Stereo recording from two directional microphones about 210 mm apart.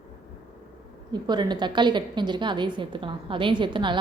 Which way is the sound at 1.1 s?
20° right (ahead or behind).